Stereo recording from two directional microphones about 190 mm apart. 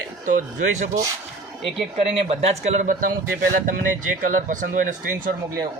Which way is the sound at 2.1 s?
35° right (ahead or behind).